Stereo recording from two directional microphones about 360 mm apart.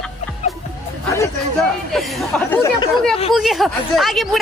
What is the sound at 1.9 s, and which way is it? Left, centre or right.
Speech, centre.